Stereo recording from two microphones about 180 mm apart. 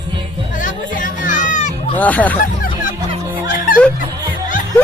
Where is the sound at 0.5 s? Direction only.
45° left (ahead or behind).